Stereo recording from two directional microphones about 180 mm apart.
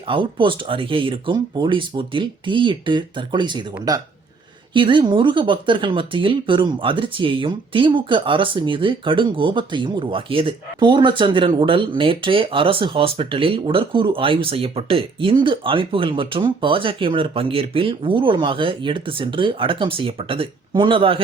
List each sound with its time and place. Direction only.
0.1 s speech: 30° right (ahead or behind)